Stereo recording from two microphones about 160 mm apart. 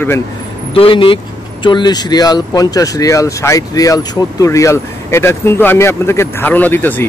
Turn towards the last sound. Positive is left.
turn(degrees=10)  # may be behind; listen again after turning